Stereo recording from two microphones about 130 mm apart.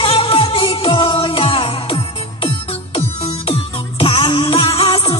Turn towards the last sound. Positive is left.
turn(degrees=45)  # may be behind; listen again after turning